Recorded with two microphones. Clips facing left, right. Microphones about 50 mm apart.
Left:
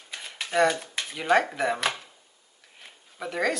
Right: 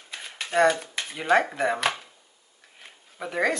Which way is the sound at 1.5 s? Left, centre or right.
Centre.